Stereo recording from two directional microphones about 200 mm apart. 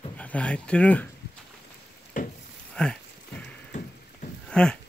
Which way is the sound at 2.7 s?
5° left (ahead or behind).